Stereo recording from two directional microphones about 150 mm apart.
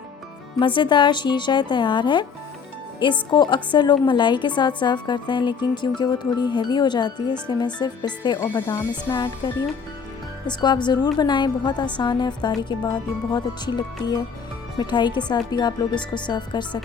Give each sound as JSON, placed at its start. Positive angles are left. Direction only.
{"t": 0.6, "sound": "a woman's voice", "side_deg": 30}
{"t": 3.2, "sound": "a woman's voice", "side_deg": 30}